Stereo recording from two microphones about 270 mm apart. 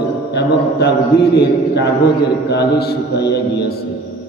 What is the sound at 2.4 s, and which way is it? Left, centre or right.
Speech, left.